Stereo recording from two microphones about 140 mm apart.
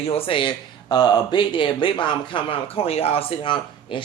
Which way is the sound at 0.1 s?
40° left (ahead or behind).